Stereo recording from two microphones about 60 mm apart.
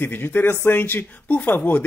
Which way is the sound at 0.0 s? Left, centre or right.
Left.